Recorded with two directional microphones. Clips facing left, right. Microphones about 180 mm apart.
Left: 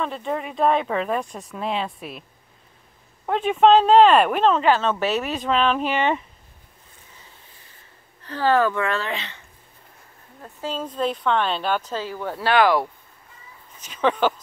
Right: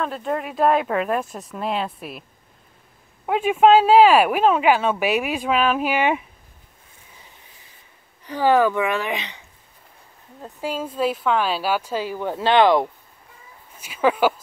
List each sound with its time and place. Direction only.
0.0 s speech: centre (ahead or behind)
3.3 s speech: 10° right (ahead or behind)
8.2 s speech: 15° right (ahead or behind)
10.4 s speech: 10° right (ahead or behind)
13.7 s speech: 10° right (ahead or behind)